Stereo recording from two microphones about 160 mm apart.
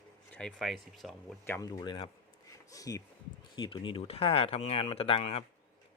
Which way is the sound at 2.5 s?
20° left (ahead or behind).